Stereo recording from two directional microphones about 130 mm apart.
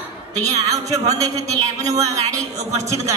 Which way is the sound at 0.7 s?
25° right (ahead or behind).